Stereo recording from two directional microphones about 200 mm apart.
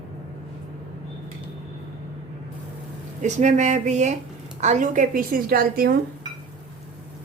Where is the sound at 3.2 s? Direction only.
35° right (ahead or behind).